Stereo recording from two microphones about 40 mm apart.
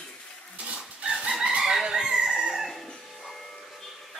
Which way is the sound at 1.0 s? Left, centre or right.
Right.